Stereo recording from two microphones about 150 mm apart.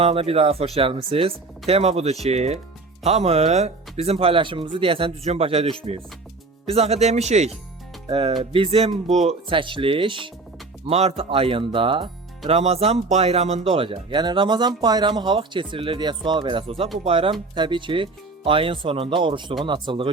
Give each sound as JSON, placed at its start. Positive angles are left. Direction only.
{"t": 0.0, "sound": "speech", "side_deg": -40}
{"t": 8.5, "sound": "speech", "side_deg": -40}